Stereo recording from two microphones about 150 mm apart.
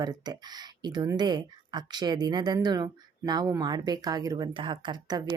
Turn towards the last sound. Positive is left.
turn(degrees=-30)  # may be behind; listen again after turning